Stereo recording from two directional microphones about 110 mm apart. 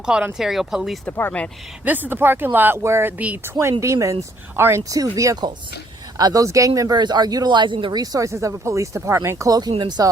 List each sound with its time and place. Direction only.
0.0 s speech: 5° right (ahead or behind)
1.0 s speech: 15° left (ahead or behind)
1.8 s speech: 15° right (ahead or behind); by 8.0 s 45° right (ahead or behind)
8.0 s speech: 30° right (ahead or behind)